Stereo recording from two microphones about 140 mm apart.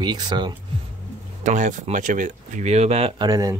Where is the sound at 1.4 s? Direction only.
65° right (ahead or behind).